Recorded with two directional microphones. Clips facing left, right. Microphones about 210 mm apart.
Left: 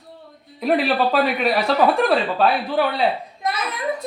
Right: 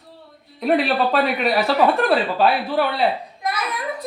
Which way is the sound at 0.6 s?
Centre (ahead or behind).